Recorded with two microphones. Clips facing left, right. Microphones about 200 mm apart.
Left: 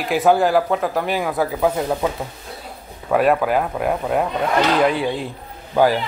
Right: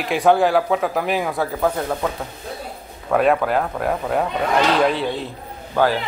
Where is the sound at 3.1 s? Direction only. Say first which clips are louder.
Left 1 dB; 5° left (ahead or behind).